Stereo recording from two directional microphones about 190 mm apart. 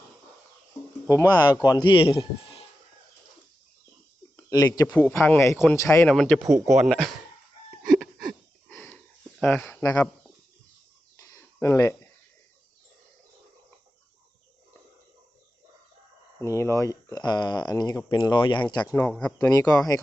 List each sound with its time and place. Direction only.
1.0 s speech: 15° left (ahead or behind)
4.4 s speech: 20° left (ahead or behind)
6.1 s speech: 5° left (ahead or behind)
7.9 s a sound: centre (ahead or behind)
8.7 s a sound: 10° left (ahead or behind)
9.4 s speech: 10° left (ahead or behind)
11.2 s a sound: 15° left (ahead or behind)
16.4 s speech: 15° left (ahead or behind)
19.5 s speech: 20° left (ahead or behind)